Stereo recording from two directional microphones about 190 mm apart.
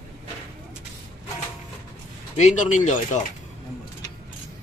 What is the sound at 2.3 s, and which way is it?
Speech, 40° left (ahead or behind).